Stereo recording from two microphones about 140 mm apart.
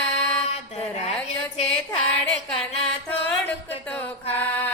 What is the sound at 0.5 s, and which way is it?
Mantra, 50° left (ahead or behind).